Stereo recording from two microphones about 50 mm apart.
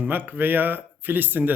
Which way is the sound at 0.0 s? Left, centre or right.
Right.